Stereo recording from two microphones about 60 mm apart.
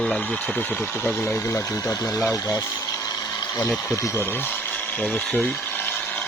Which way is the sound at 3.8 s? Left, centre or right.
Left.